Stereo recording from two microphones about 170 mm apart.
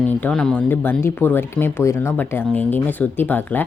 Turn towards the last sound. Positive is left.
turn(degrees=10)  # may be behind; listen again after turning